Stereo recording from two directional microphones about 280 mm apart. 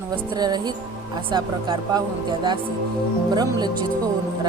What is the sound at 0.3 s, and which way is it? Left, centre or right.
Speech, centre.